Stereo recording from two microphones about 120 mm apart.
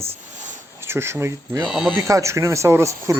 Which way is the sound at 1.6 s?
Centre (ahead or behind).